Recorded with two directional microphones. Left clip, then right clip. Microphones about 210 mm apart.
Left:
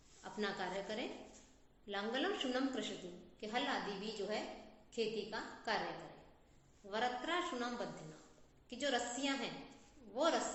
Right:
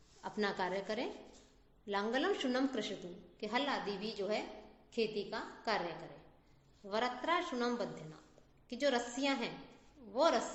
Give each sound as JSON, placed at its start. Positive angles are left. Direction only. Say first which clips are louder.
{"t": 0.2, "sound": "a woman's voice", "louder": "right 5 dB", "side_deg": -45}
{"t": 6.9, "sound": "a woman's voice", "louder": "right 3 dB", "side_deg": -45}
{"t": 8.7, "sound": "a woman's voice", "louder": "right 4 dB", "side_deg": -45}